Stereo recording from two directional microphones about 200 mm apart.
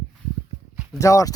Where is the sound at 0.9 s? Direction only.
15° left (ahead or behind).